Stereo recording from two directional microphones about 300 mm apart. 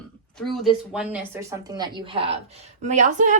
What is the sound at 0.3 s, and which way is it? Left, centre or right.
A woman's voice, centre.